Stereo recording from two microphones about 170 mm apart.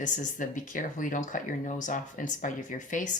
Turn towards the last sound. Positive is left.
turn(degrees=50)  # may be behind; listen again after turning